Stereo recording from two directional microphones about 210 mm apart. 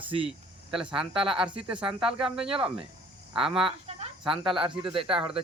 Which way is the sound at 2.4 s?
25° right (ahead or behind).